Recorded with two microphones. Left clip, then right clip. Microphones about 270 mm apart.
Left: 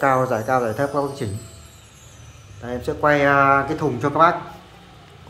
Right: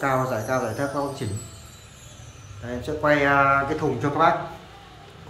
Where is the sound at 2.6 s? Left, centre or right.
Centre.